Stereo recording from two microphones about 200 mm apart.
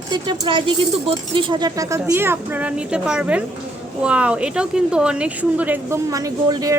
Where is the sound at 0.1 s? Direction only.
25° right (ahead or behind).